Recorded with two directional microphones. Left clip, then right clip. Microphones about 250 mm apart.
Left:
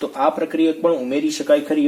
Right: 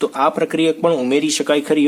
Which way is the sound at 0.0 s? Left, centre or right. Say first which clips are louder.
Right 3 dB; right.